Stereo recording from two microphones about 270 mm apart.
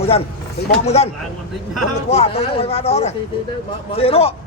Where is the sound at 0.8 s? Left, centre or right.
Left.